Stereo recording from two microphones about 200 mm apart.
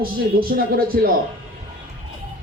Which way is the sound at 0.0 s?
45° right (ahead or behind).